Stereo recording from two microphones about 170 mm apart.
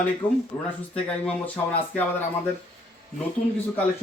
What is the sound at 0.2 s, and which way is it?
Speech, 10° left (ahead or behind).